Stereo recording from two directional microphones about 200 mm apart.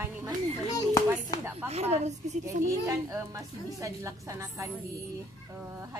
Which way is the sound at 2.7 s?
15° right (ahead or behind).